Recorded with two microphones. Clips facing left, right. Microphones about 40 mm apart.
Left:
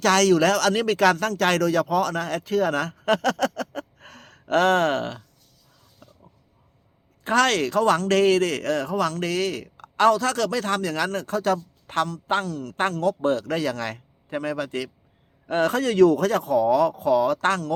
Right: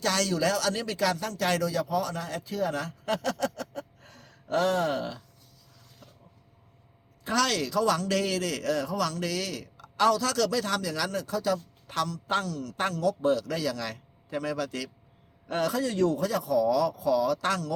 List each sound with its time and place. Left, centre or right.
0.0 s speech: left
7.3 s speech: left
15.7 s speech: left
16.3 s speech: left